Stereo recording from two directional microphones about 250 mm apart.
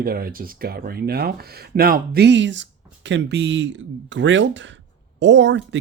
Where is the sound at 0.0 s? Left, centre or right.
Right.